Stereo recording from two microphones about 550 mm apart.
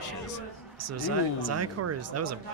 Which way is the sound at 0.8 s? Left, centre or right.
Right.